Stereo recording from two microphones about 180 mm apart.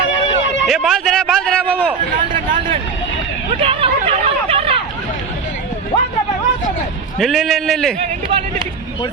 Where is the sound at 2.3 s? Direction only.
30° right (ahead or behind).